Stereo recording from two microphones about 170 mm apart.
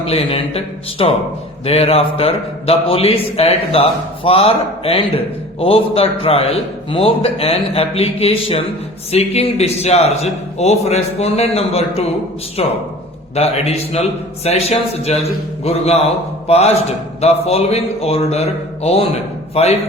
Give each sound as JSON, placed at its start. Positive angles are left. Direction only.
{"t": 0.1, "sound": "a man's voice", "side_deg": 35}